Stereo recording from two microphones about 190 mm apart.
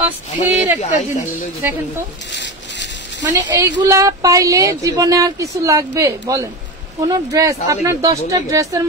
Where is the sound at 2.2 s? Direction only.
70° left (ahead or behind).